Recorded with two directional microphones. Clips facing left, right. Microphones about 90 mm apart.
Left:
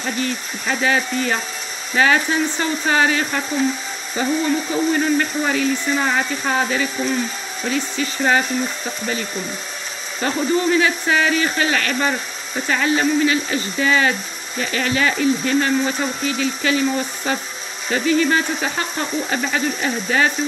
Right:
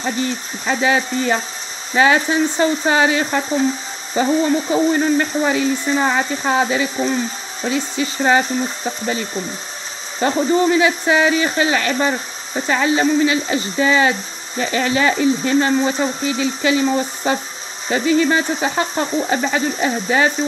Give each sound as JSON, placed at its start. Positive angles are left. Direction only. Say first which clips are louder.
{"t": 0.0, "sound": "speech", "louder": "right 2 dB", "side_deg": -25}
{"t": 10.2, "sound": "speech", "louder": "right 3 dB", "side_deg": -20}